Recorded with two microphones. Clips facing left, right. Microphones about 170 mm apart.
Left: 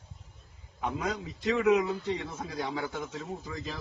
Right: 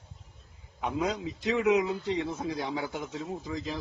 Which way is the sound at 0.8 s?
20° right (ahead or behind).